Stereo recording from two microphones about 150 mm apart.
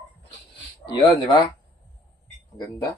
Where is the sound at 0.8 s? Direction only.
30° left (ahead or behind).